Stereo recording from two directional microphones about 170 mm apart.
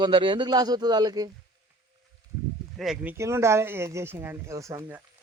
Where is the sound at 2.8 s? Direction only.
Centre (ahead or behind).